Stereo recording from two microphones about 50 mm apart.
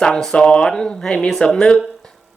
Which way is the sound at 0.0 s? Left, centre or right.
Centre.